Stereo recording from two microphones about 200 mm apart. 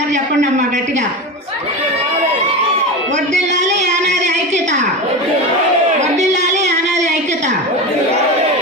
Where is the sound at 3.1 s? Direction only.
35° right (ahead or behind).